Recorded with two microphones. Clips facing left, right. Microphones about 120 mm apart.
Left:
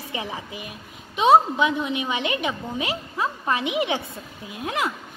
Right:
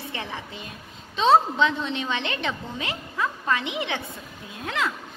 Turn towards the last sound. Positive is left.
turn(degrees=20)  # may be behind; listen again after turning